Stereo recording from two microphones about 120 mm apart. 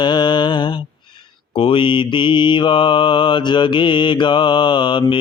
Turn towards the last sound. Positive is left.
turn(degrees=40)  # may be behind; listen again after turning